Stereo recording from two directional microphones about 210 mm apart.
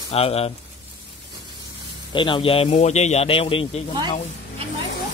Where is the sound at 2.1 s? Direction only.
25° left (ahead or behind).